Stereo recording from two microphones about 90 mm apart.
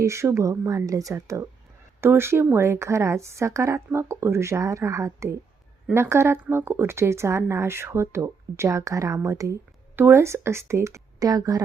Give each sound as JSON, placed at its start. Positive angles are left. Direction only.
{"t": 0.0, "sound": "speech", "side_deg": -30}
{"t": 2.0, "sound": "speech", "side_deg": -25}